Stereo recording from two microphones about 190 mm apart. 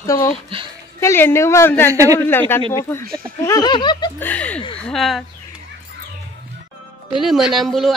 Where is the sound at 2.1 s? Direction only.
10° left (ahead or behind).